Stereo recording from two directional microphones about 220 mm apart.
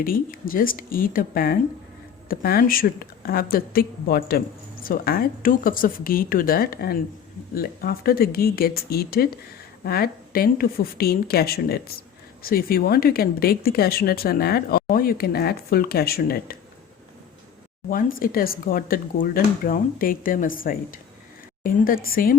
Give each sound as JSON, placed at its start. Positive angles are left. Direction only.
{"t": 0.0, "sound": "a woman's voice", "side_deg": 40}
{"t": 17.8, "sound": "speech", "side_deg": 40}